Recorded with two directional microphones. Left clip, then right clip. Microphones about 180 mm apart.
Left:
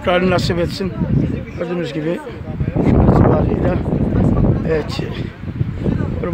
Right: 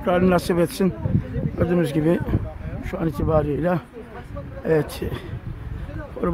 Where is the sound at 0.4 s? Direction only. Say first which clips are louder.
Left 2 dB; 15° right (ahead or behind).